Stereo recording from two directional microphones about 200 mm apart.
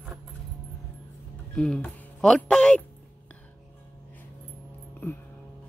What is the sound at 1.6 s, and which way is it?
Speech, 5° left (ahead or behind).